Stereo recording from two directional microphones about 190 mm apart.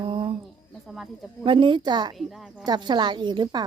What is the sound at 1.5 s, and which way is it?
Speech, 25° right (ahead or behind).